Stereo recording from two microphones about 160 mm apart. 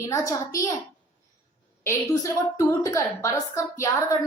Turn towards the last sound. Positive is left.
turn(degrees=20)  # may be behind; listen again after turning